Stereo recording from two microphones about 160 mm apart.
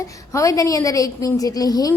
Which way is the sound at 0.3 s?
20° left (ahead or behind).